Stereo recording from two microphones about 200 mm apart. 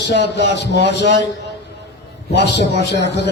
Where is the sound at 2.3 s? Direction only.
55° left (ahead or behind).